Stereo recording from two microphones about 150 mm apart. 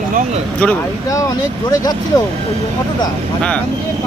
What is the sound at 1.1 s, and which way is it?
Speech, 20° left (ahead or behind).